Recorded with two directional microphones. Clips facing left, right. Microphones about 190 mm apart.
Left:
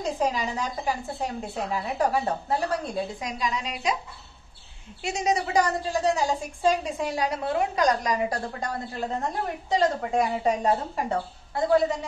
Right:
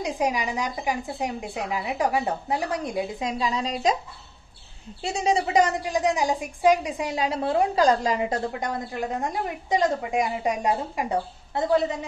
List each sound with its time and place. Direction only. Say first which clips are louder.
0.0 s a woman's voice: right 1 dB; 15° right (ahead or behind); by 3.9 s 35° right (ahead or behind)
5.0 s a woman's voice: right 2 dB; 30° right (ahead or behind); by 11.6 s 15° right (ahead or behind)